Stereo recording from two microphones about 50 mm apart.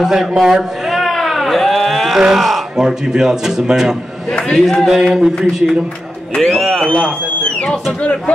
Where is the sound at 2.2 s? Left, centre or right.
Centre.